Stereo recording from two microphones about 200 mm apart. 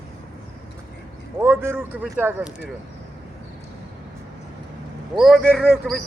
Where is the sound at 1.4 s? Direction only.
10° right (ahead or behind).